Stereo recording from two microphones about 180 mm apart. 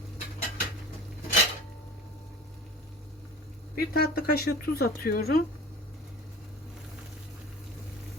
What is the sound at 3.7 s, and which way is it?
Speech, 55° left (ahead or behind).